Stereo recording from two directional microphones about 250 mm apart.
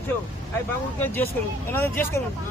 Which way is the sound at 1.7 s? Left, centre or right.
Centre.